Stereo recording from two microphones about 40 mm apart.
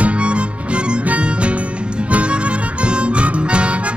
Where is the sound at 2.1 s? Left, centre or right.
Right.